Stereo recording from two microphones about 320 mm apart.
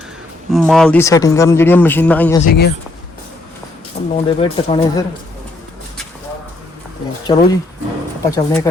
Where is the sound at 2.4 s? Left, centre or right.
Left.